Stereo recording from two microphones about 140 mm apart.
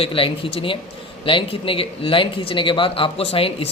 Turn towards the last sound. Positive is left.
turn(degrees=40)  # may be behind; listen again after turning